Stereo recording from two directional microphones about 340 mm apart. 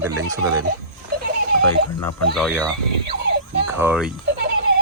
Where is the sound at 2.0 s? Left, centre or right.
Centre.